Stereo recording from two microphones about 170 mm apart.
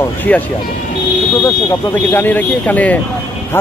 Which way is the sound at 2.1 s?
10° left (ahead or behind).